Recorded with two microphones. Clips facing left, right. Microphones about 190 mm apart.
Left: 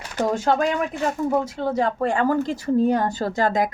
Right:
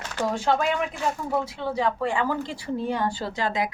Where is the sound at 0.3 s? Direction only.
45° left (ahead or behind).